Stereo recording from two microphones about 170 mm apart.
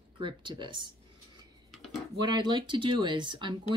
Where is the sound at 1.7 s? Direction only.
Centre (ahead or behind).